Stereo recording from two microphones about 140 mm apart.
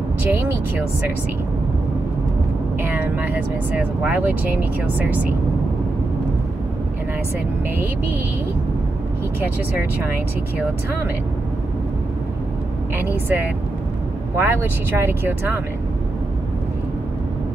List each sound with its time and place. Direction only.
0.3 s speech: 15° right (ahead or behind)
2.8 s speech: 15° right (ahead or behind)
7.7 s speech: 10° right (ahead or behind)
12.9 s speech: 15° right (ahead or behind)